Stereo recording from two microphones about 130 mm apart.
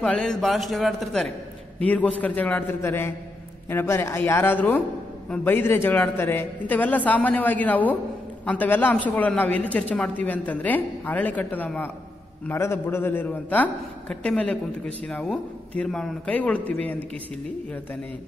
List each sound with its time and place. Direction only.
0.0 s a man's voice: 5° left (ahead or behind)